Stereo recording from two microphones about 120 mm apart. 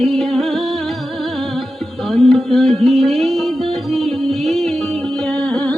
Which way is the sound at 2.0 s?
5° left (ahead or behind).